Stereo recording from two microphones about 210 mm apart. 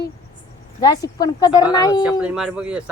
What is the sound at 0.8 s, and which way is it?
Speech, 20° left (ahead or behind).